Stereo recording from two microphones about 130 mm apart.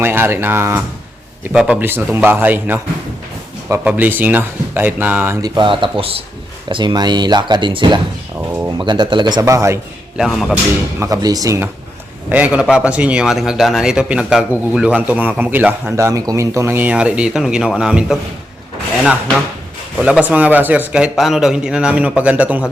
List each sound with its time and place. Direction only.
0.0 s speech: 15° right (ahead or behind)
3.8 s speech: 15° right (ahead or behind)
5.4 s speech: 40° right (ahead or behind)
9.4 s speech: 25° right (ahead or behind)
10.2 s a man's voice: centre (ahead or behind)
11.0 s speech: 30° right (ahead or behind)
12.3 s a man's voice: 10° right (ahead or behind)
20.0 s speech: 10° right (ahead or behind)